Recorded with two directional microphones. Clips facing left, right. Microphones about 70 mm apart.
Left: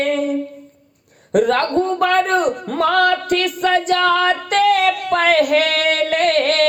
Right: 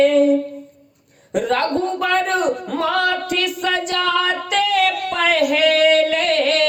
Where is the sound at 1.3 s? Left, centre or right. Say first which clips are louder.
Left 3 dB; left.